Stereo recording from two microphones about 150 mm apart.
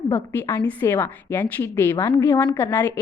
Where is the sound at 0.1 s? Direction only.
15° left (ahead or behind).